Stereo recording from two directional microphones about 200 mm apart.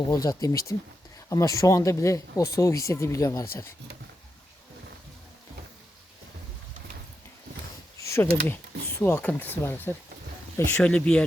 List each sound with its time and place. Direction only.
0.1 s speech: 15° left (ahead or behind)
8.0 s a sound: 15° left (ahead or behind)
9.0 s speech: 10° left (ahead or behind)